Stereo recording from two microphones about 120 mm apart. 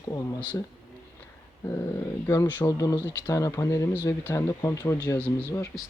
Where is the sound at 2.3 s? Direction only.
20° left (ahead or behind).